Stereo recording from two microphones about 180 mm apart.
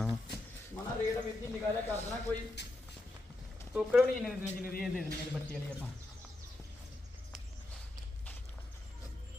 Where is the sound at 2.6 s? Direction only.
70° left (ahead or behind).